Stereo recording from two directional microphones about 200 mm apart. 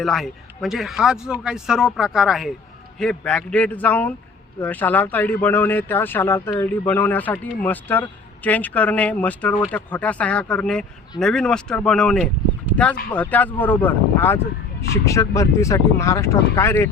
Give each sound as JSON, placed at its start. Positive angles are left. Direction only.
{"t": 0.0, "sound": "speech", "side_deg": 0}